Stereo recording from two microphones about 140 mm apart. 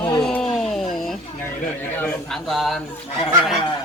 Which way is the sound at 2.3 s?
Centre (ahead or behind).